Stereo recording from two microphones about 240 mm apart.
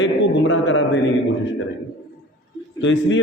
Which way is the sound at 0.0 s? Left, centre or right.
Left.